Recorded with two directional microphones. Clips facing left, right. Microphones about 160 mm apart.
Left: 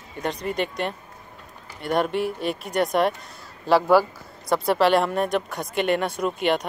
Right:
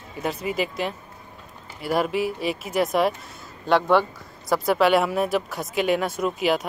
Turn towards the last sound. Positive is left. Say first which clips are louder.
# even
turn(degrees=0)  # may be behind; listen again after turning